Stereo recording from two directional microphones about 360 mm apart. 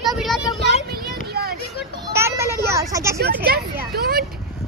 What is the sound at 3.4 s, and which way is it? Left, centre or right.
Speech, right.